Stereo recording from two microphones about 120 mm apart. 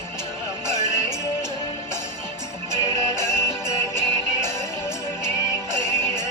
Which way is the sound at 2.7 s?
25° left (ahead or behind).